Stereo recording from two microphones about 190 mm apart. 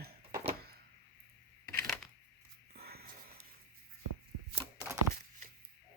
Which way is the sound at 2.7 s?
55° right (ahead or behind).